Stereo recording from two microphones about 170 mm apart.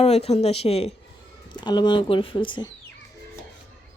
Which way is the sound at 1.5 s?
25° left (ahead or behind).